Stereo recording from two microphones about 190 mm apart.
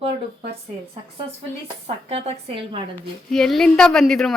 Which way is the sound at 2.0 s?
35° right (ahead or behind).